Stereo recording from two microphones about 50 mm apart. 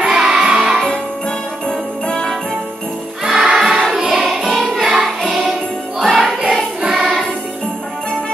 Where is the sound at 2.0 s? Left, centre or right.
Centre.